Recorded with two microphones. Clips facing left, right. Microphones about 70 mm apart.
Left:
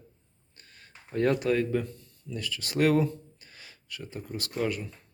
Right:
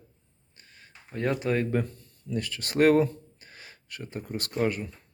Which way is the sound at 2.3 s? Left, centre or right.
Right.